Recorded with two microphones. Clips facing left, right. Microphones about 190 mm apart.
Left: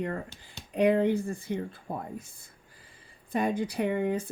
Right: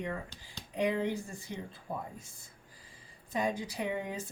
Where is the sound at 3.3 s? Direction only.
60° left (ahead or behind).